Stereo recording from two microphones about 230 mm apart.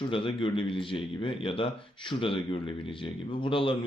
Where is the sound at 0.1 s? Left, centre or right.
Left.